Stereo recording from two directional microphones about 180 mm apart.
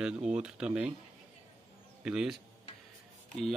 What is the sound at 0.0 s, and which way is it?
Speech, 5° right (ahead or behind).